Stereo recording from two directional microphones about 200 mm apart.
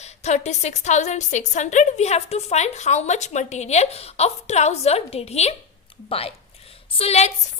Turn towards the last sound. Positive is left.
turn(degrees=30)  # may be behind; listen again after turning